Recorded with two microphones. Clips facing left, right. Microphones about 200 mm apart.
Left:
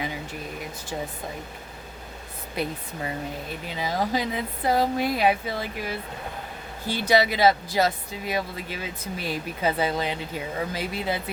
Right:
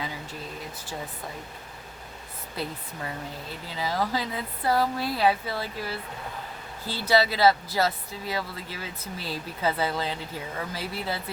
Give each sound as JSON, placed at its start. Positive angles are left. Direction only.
{"t": 2.6, "sound": "speech", "side_deg": 20}
{"t": 7.1, "sound": "speech", "side_deg": 15}